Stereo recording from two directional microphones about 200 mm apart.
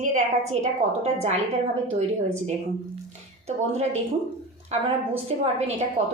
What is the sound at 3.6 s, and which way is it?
A woman's voice, 35° right (ahead or behind).